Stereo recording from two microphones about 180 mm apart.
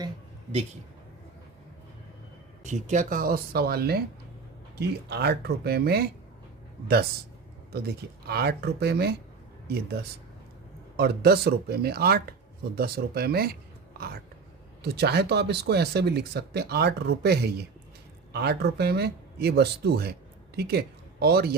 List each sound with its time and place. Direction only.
2.6 s speech: 40° right (ahead or behind); by 6.1 s 60° right (ahead or behind)
7.7 s speech: 60° right (ahead or behind)
14.8 s speech: 65° right (ahead or behind)